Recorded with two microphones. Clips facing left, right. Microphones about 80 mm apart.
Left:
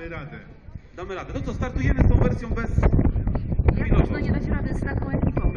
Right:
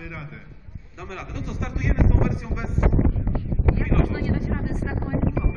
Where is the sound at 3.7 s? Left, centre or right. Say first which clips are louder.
Left 1 dB; left.